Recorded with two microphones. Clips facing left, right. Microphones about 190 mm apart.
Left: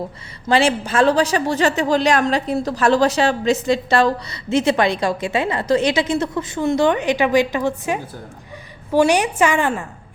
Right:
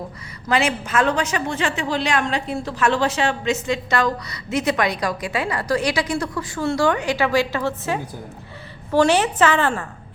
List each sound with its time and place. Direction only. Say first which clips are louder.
0.4 s a woman's voice: left 4 dB; 30° left (ahead or behind); by 9.8 s 15° left (ahead or behind)